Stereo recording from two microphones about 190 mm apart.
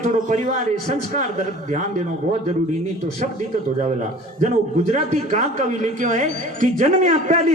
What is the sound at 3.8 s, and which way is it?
A man's voice, 40° right (ahead or behind).